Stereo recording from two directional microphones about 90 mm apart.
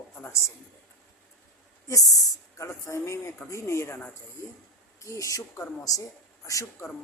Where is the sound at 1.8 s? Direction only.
40° left (ahead or behind).